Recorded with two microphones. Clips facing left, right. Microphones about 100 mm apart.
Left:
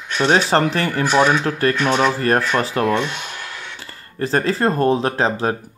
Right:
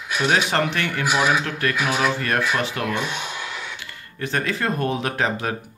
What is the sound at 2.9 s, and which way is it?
Speech, 10° right (ahead or behind).